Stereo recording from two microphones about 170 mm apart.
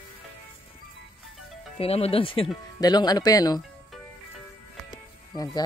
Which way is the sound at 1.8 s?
35° left (ahead or behind).